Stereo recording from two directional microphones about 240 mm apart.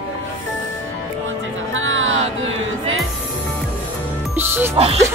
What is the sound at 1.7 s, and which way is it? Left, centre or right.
Music, right.